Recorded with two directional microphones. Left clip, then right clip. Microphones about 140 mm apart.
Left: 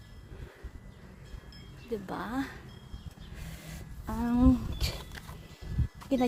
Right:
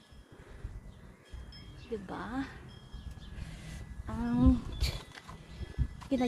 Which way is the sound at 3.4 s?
45° left (ahead or behind).